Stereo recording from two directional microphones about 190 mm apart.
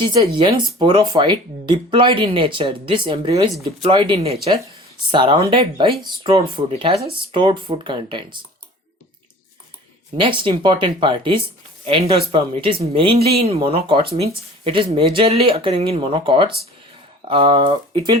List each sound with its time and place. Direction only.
0.0 s speech: 25° right (ahead or behind)
10.2 s speech: 25° right (ahead or behind)